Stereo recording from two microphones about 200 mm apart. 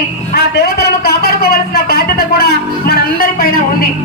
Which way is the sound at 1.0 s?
50° left (ahead or behind).